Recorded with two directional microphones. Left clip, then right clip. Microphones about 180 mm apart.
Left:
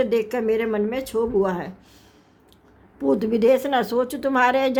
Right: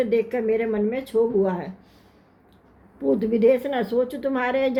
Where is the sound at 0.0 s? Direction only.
35° left (ahead or behind).